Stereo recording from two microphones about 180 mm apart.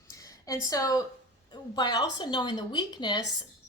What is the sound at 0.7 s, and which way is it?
Speech, 20° left (ahead or behind).